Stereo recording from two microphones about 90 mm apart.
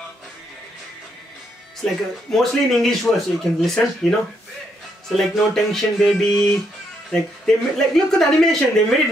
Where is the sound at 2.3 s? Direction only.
5° left (ahead or behind).